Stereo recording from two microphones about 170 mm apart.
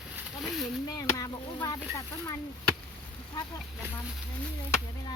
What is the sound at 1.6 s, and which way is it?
Speech, 25° left (ahead or behind).